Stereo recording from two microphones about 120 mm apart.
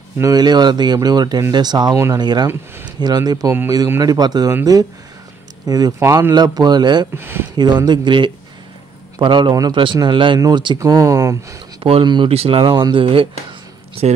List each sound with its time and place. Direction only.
0.2 s speech: 35° right (ahead or behind)
5.7 s speech: 30° right (ahead or behind)
6.3 s speech: 35° right (ahead or behind)
7.2 s speech: 20° right (ahead or behind)
7.5 s speech: 40° right (ahead or behind)
10.9 s speech: 25° right (ahead or behind)
11.8 s speech: 45° right (ahead or behind)
12.3 s speech: 55° right (ahead or behind)
14.0 s speech: 60° right (ahead or behind)